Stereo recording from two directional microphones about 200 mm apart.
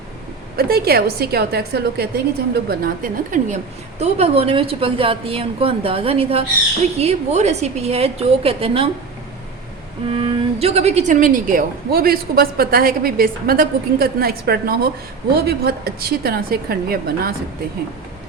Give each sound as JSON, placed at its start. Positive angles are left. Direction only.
{"t": 0.5, "sound": "a woman's voice", "side_deg": -50}
{"t": 4.0, "sound": "a woman's voice", "side_deg": -30}
{"t": 10.2, "sound": "a woman's voice", "side_deg": -30}